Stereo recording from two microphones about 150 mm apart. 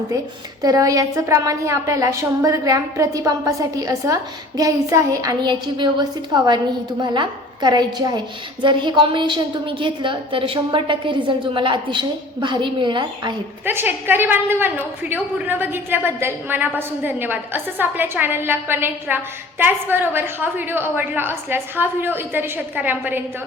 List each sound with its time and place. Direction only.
0.6 s a woman's voice: 25° right (ahead or behind)
13.7 s a woman's voice: 15° right (ahead or behind)